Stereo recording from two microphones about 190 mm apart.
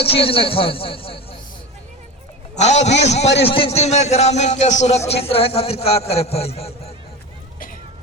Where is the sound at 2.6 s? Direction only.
35° left (ahead or behind).